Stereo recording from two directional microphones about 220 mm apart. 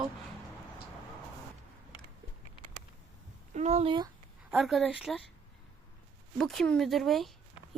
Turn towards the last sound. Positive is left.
turn(degrees=0)  # may be behind; listen again after turning